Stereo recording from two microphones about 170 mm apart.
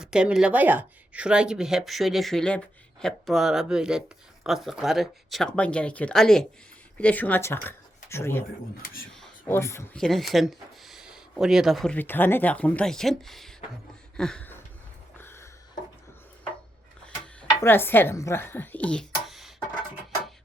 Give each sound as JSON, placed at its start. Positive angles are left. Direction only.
{"t": 0.0, "sound": "speech", "side_deg": -5}
{"t": 8.8, "sound": "speech", "side_deg": 60}
{"t": 9.1, "sound": "a sound", "side_deg": 0}
{"t": 9.5, "sound": "speech", "side_deg": 15}
{"t": 10.0, "sound": "speech", "side_deg": 0}
{"t": 14.2, "sound": "a sound", "side_deg": 5}
{"t": 17.6, "sound": "speech", "side_deg": 15}